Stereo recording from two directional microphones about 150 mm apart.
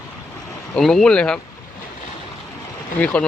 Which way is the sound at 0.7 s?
5° left (ahead or behind).